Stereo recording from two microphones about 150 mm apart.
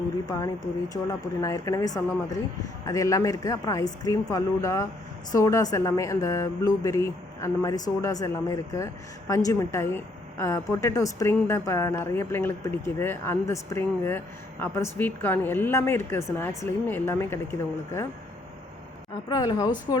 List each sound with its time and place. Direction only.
0.3 s a woman's voice: 25° left (ahead or behind)
19.3 s speech: 25° left (ahead or behind)